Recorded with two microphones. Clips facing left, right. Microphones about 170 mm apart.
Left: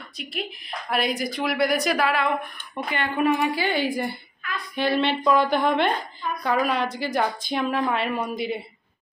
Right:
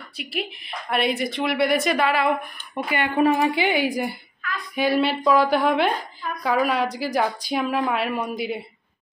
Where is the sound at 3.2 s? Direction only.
35° right (ahead or behind).